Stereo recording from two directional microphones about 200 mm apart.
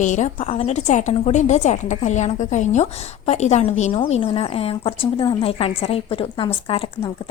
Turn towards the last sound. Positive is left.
turn(degrees=25)  # may be behind; listen again after turning